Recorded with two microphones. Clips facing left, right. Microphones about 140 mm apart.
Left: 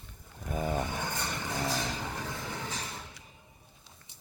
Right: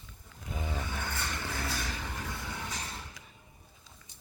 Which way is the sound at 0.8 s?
15° left (ahead or behind).